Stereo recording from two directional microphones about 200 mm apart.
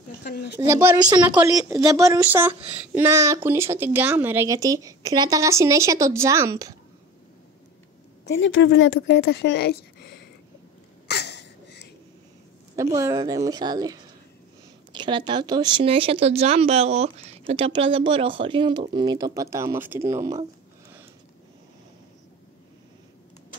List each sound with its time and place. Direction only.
0.2 s a woman's voice: 55° left (ahead or behind)
0.7 s a woman's voice: 15° right (ahead or behind)
8.3 s speech: 70° left (ahead or behind)
11.1 s a sound: 55° left (ahead or behind)
12.7 s a woman's voice: 15° right (ahead or behind)